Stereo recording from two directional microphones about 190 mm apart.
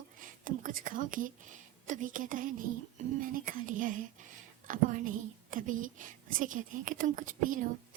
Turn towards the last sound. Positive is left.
turn(degrees=-45)  # may be behind; listen again after turning